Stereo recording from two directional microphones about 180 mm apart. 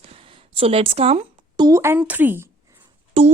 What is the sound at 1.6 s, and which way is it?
Speech, 15° right (ahead or behind).